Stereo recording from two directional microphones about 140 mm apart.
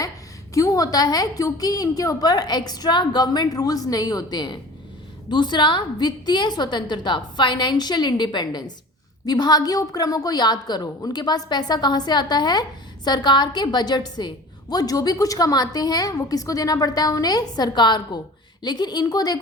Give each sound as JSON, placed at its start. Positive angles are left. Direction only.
{"t": 0.5, "sound": "a woman's voice", "side_deg": 25}